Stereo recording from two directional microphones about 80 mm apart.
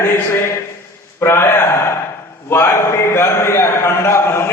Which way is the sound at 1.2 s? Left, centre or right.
Left.